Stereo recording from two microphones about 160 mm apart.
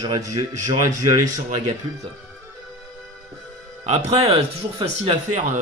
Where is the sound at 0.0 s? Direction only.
20° right (ahead or behind).